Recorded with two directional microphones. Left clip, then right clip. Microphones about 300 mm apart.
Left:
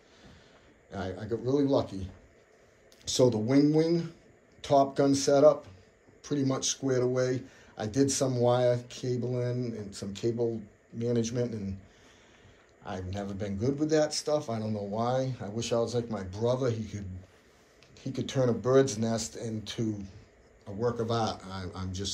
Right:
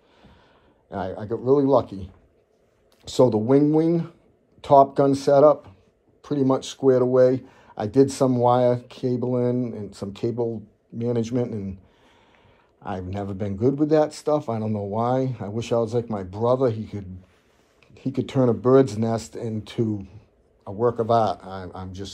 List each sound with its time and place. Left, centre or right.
0.8 s speech: centre
3.1 s speech: centre
12.8 s speech: centre